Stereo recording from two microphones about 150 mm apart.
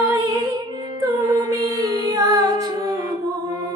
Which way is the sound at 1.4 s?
25° right (ahead or behind).